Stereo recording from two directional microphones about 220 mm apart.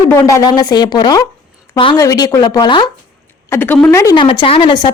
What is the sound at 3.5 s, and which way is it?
A woman's voice, 10° left (ahead or behind).